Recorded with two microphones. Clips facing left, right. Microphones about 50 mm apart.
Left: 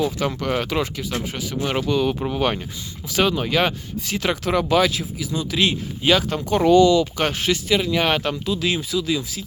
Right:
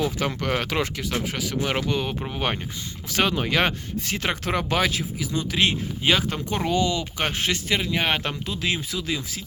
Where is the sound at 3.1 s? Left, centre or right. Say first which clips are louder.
Left 3 dB; right.